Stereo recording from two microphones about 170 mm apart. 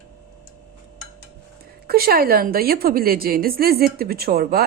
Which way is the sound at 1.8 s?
65° right (ahead or behind).